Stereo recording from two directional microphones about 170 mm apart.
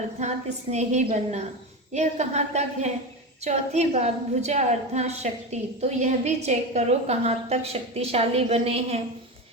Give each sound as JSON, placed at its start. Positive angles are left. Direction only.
{"t": 0.2, "sound": "a woman's voice", "side_deg": -40}